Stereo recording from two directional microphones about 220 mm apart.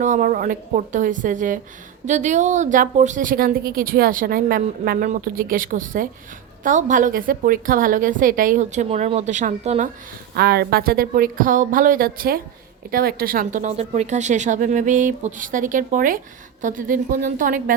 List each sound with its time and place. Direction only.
0.0 s speech: 35° right (ahead or behind)
10.3 s speech: 45° right (ahead or behind)